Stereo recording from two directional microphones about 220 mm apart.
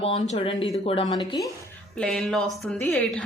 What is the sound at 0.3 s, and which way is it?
Speech, 25° left (ahead or behind).